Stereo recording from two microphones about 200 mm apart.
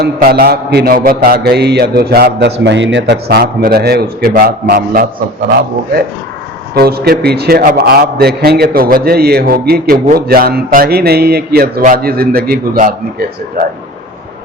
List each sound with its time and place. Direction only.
0.0 s a man's voice: 50° right (ahead or behind)
6.7 s a man's voice: 50° right (ahead or behind)